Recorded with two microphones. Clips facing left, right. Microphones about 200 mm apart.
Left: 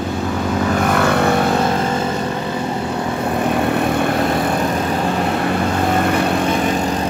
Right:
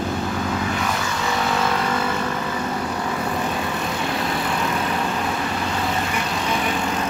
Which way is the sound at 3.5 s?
60° left (ahead or behind).